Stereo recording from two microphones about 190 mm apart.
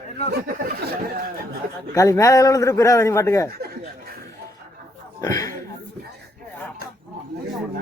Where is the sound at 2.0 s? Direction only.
15° left (ahead or behind).